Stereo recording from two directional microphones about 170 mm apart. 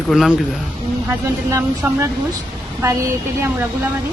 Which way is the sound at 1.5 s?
15° right (ahead or behind).